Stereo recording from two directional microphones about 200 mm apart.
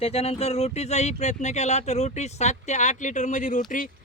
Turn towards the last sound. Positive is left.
turn(degrees=40)  # may be behind; listen again after turning